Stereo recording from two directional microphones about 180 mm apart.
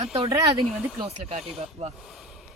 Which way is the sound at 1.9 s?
Centre (ahead or behind).